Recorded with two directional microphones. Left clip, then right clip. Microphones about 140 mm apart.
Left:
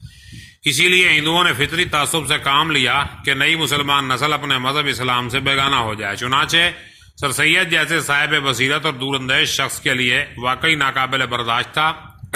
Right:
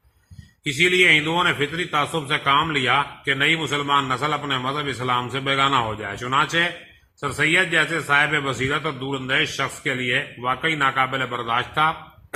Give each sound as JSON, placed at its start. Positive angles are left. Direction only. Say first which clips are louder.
{"t": 0.6, "sound": "a man's voice", "louder": "left 4 dB", "side_deg": 35}